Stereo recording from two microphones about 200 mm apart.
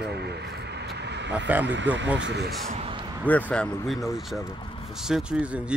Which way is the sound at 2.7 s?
30° right (ahead or behind).